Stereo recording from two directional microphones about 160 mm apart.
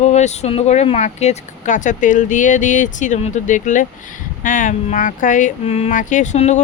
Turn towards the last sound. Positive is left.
turn(degrees=45)  # may be behind; listen again after turning